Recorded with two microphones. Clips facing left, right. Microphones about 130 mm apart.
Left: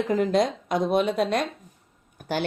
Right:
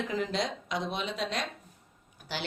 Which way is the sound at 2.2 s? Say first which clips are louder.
Left 11 dB; 55° left (ahead or behind).